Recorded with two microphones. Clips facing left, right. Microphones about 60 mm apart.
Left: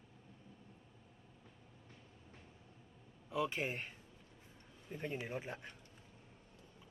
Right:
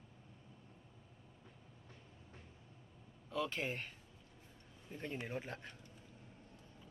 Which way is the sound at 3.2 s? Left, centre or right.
Centre.